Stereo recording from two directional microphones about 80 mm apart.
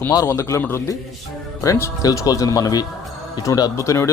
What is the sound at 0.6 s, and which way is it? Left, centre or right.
Speech, left.